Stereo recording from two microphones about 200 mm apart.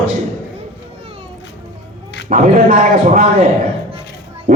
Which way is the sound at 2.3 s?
40° right (ahead or behind).